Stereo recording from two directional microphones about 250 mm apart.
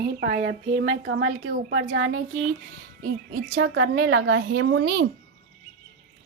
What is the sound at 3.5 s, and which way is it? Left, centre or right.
A woman's voice, right.